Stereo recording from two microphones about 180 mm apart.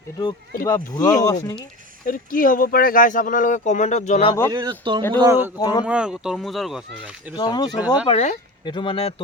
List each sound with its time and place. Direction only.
0.6 s speech: 20° left (ahead or behind)
2.0 s speech: 50° left (ahead or behind)
4.5 s speech: 25° right (ahead or behind)
5.2 s a man's voice: 15° right (ahead or behind)
5.5 s speech: 20° left (ahead or behind)
5.8 s speech: 5° right (ahead or behind)
7.3 s speech: 25° left (ahead or behind)
8.0 s speech: 35° left (ahead or behind)